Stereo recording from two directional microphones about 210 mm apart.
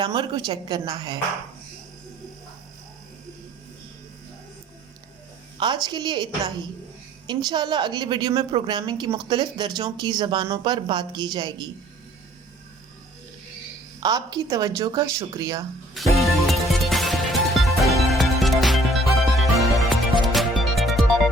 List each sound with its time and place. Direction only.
0.0 s a woman's voice: 20° right (ahead or behind)
5.5 s a woman's voice: 20° right (ahead or behind)
14.0 s a woman's voice: 20° right (ahead or behind)
16.0 s music: centre (ahead or behind)